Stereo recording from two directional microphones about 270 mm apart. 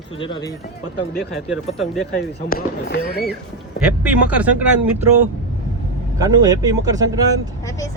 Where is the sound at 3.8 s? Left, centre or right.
Centre.